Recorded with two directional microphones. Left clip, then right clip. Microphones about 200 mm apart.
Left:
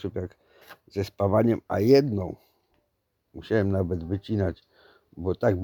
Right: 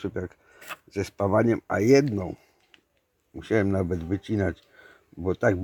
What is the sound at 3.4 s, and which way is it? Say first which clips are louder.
Speech: right 1 dB; 40° left (ahead or behind).